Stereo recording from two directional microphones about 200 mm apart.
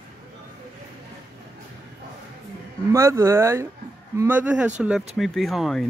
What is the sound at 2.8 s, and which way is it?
Speech, 15° right (ahead or behind).